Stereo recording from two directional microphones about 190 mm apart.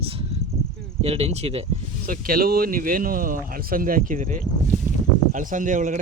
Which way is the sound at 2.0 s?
50° right (ahead or behind).